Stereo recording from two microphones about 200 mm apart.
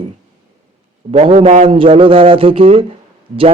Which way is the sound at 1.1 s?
30° right (ahead or behind).